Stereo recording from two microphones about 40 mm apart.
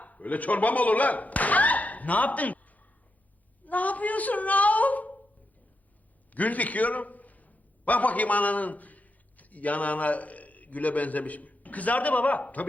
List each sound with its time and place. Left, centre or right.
0.0 s a woman's voice: left
6.3 s a man's voice: left